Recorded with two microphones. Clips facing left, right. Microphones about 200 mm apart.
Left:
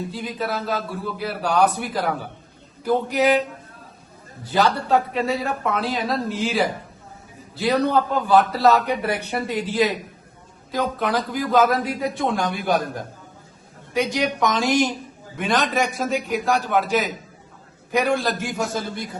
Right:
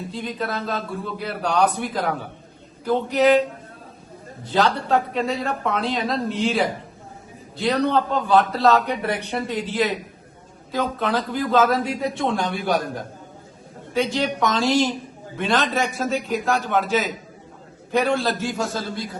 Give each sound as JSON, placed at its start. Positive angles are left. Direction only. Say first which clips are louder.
{"t": 0.1, "sound": "a man's voice", "louder": "even", "side_deg": 5}
{"t": 4.5, "sound": "a man's voice", "louder": "left 1 dB", "side_deg": 5}
{"t": 14.1, "sound": "a man's voice", "louder": "even", "side_deg": 15}
{"t": 17.9, "sound": "speech", "louder": "even", "side_deg": 10}